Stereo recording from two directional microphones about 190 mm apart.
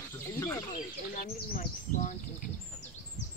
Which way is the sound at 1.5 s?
45° left (ahead or behind).